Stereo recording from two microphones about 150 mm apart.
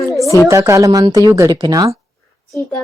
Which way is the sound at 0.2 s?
20° left (ahead or behind).